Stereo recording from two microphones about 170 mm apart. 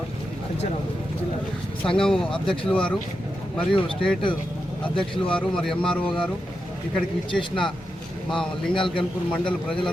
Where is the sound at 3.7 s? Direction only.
30° left (ahead or behind).